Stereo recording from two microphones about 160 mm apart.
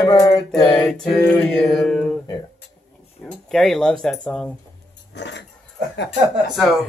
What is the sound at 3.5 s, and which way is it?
Speech, centre (ahead or behind).